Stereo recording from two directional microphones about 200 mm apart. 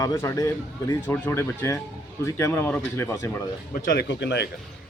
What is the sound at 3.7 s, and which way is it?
Speech, 50° left (ahead or behind).